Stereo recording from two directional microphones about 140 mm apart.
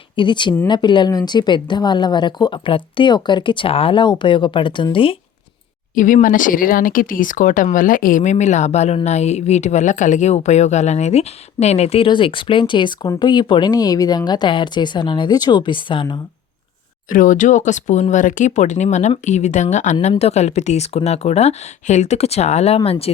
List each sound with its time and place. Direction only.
0.2 s speech: 35° left (ahead or behind)
5.9 s a woman's voice: 70° left (ahead or behind); by 16.2 s 35° left (ahead or behind)
17.1 s speech: 70° left (ahead or behind); by 23.1 s 45° left (ahead or behind)